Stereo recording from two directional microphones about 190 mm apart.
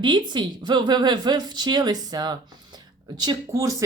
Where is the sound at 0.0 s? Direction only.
25° right (ahead or behind).